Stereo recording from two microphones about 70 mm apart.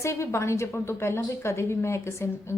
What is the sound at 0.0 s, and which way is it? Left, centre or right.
A woman's voice, left.